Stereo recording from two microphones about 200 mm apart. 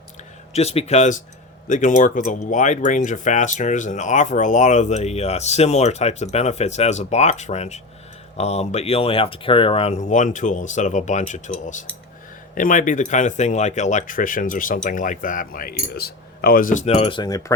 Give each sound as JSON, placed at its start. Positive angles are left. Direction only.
{"t": 0.5, "sound": "speech", "side_deg": 30}